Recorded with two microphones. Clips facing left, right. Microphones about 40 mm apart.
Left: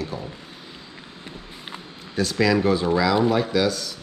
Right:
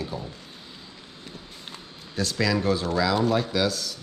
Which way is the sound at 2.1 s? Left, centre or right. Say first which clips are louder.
Left 5 dB; centre.